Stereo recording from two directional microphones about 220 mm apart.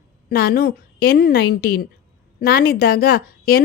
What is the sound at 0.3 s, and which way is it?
A woman's voice, 45° left (ahead or behind).